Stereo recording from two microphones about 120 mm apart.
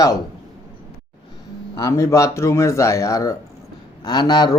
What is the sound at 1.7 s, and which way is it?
Speech, 30° left (ahead or behind).